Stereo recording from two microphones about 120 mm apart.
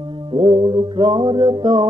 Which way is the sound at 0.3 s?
45° right (ahead or behind).